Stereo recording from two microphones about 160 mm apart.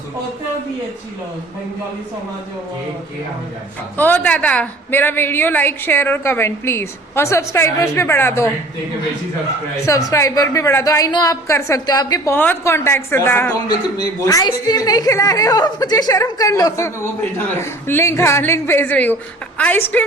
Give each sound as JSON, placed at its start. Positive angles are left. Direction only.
{"t": 3.9, "sound": "a woman's voice", "side_deg": 10}
{"t": 10.1, "sound": "a woman's voice", "side_deg": 20}